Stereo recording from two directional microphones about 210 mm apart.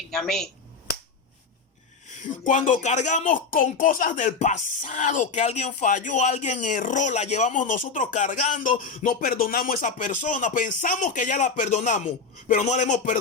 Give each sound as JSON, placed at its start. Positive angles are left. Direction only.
{"t": 0.1, "sound": "speech", "side_deg": 0}
{"t": 2.0, "sound": "speech", "side_deg": 35}